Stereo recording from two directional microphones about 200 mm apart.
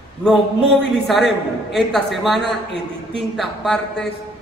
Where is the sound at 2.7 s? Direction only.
25° right (ahead or behind).